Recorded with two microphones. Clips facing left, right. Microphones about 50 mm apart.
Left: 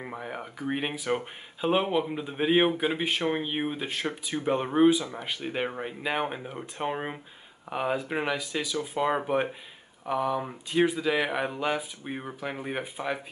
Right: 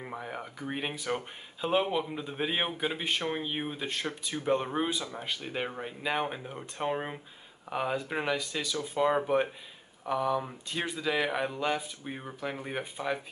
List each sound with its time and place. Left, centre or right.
0.1 s speech: centre